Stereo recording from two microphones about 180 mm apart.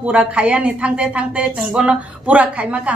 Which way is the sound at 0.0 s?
5° right (ahead or behind).